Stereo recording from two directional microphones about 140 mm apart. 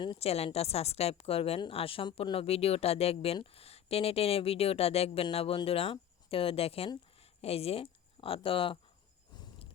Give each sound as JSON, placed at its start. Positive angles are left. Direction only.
{"t": 0.2, "sound": "a woman's voice", "side_deg": 45}